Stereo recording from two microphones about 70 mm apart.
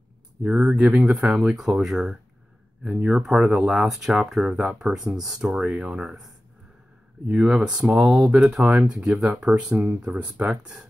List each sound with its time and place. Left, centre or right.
0.4 s speech: centre